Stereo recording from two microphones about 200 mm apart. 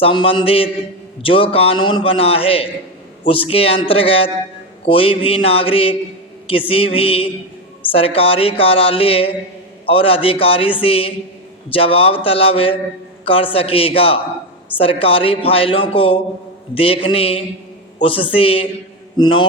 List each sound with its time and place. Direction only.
0.0 s a woman's voice: 25° left (ahead or behind)